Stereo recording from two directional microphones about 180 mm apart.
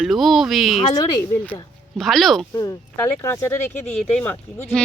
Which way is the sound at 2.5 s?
15° left (ahead or behind).